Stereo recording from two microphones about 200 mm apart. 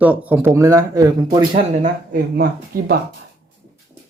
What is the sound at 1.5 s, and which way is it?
Speech, 45° right (ahead or behind).